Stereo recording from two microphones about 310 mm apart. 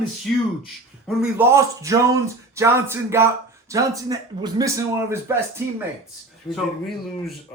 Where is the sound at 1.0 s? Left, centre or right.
Centre.